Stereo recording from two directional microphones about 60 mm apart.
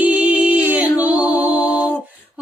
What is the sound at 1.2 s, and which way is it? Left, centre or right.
Music, right.